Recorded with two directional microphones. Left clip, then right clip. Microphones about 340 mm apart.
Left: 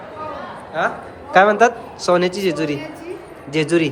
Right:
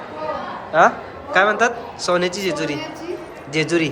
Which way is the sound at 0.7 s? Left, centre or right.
Right.